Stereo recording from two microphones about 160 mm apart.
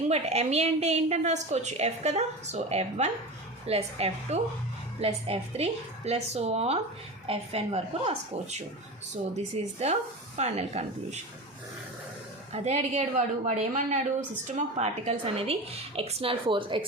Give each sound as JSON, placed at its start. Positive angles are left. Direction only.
{"t": 0.1, "sound": "a woman's voice", "side_deg": -40}
{"t": 12.5, "sound": "a woman's voice", "side_deg": -40}